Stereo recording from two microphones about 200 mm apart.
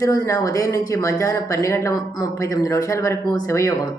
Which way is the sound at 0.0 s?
15° left (ahead or behind).